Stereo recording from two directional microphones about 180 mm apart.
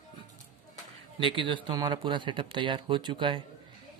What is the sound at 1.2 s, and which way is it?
Speech, 25° right (ahead or behind).